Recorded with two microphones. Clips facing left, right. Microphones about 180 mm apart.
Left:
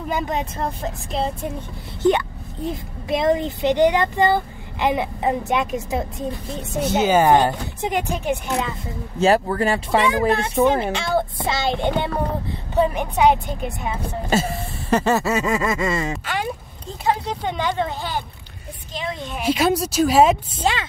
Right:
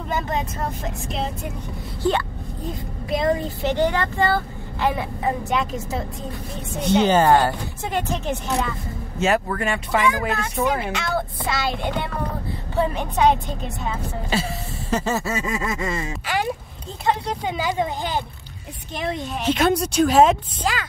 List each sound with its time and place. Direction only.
0.1 s speech: 20° left (ahead or behind)
3.1 s speech: 20° left (ahead or behind)
6.8 s speech: 5° left (ahead or behind)
9.2 s speech: 35° left (ahead or behind)
12.7 s speech: 15° left (ahead or behind)
14.3 s a sound: 50° left (ahead or behind); by 16.1 s 85° left
17.0 s speech: centre (ahead or behind); by 18.2 s 15° right (ahead or behind)
19.3 s speech: 5° left (ahead or behind)
20.6 s speech: 25° left (ahead or behind)